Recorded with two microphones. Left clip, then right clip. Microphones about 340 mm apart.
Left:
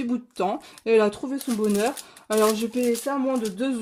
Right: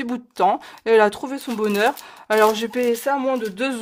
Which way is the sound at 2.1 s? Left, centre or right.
Right.